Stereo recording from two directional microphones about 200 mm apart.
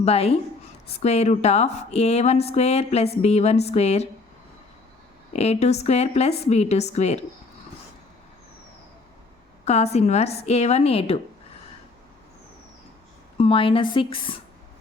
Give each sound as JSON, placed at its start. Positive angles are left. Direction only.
{"t": 0.0, "sound": "speech", "side_deg": 30}
{"t": 5.3, "sound": "speech", "side_deg": 35}
{"t": 9.6, "sound": "speech", "side_deg": 35}
{"t": 13.3, "sound": "speech", "side_deg": 25}